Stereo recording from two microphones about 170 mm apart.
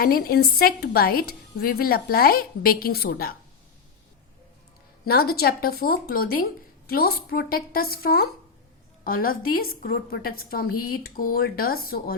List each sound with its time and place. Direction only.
0.0 s a woman's voice: 60° left (ahead or behind)
5.0 s a woman's voice: 65° left (ahead or behind)